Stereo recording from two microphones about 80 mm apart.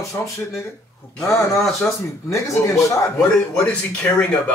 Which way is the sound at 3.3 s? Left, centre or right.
Centre.